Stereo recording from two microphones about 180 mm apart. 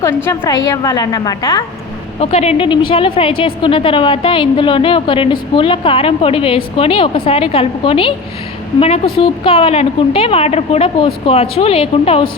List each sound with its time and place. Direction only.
0.3 s a woman's voice: 20° left (ahead or behind)
2.3 s a woman's voice: 35° left (ahead or behind)
9.1 s a woman's voice: 30° left (ahead or behind)